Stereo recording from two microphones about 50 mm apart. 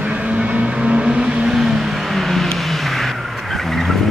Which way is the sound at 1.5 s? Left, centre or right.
Centre.